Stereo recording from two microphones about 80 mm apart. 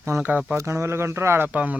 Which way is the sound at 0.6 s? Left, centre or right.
Right.